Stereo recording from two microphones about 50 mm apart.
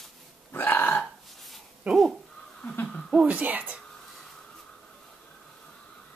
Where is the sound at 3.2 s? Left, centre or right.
Right.